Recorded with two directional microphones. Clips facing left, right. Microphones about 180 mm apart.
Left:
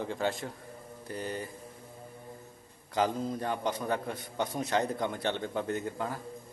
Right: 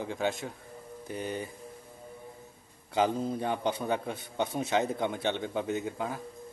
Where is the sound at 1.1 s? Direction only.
15° right (ahead or behind).